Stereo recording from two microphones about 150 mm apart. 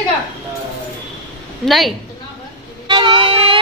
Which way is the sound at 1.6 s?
Centre (ahead or behind).